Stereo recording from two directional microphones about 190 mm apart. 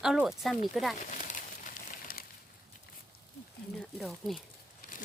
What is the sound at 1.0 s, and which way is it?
Crumpling, 45° left (ahead or behind).